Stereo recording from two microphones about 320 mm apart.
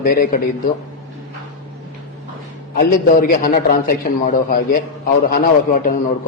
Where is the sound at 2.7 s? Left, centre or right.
Left.